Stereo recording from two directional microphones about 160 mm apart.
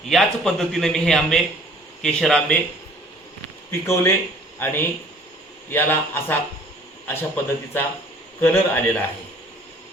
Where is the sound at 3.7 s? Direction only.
15° left (ahead or behind).